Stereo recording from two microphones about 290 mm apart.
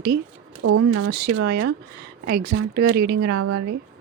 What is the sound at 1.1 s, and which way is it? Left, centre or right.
Speech, right.